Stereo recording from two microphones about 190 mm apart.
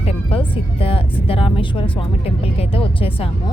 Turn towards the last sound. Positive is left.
turn(degrees=30)  # may be behind; listen again after turning